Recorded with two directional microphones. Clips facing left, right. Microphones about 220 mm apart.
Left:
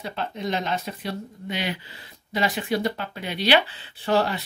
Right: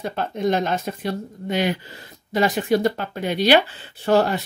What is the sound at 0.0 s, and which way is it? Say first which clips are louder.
Speech: right 7 dB; 50° right (ahead or behind).